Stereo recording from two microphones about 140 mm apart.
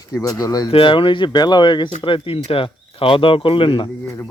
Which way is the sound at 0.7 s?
40° left (ahead or behind).